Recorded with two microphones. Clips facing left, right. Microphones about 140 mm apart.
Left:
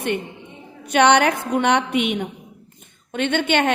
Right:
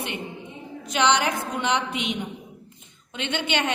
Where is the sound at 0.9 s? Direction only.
60° left (ahead or behind).